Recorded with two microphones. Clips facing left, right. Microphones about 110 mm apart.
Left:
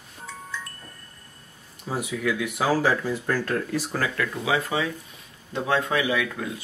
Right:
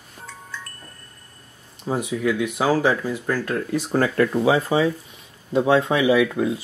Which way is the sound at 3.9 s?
35° right (ahead or behind).